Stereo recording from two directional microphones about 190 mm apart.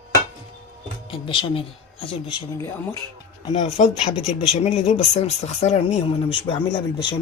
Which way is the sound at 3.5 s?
35° left (ahead or behind).